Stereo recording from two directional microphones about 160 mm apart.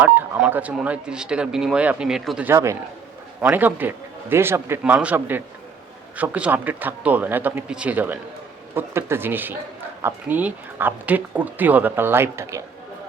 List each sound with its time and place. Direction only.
0.0 s speech: 10° right (ahead or behind)
2.5 s speech: 15° right (ahead or behind)